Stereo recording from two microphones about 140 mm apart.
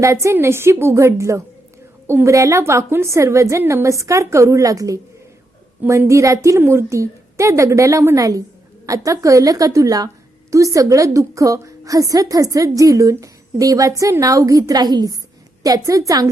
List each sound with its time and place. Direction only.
0.0 s a woman's voice: 20° right (ahead or behind)